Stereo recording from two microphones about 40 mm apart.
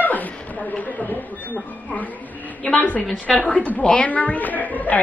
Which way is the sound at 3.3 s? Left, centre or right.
Left.